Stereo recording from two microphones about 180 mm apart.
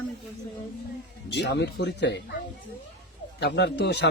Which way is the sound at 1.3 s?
70° left (ahead or behind).